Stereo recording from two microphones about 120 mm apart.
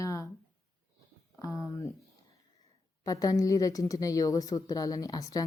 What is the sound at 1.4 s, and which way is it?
Speech, 25° left (ahead or behind).